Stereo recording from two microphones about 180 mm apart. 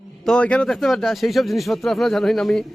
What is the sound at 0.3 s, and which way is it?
Speech, 5° left (ahead or behind).